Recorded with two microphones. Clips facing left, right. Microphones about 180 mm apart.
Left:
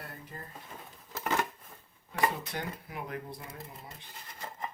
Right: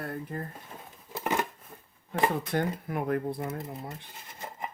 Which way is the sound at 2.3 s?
50° right (ahead or behind).